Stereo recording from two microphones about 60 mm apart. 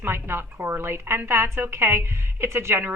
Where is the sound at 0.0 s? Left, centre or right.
Right.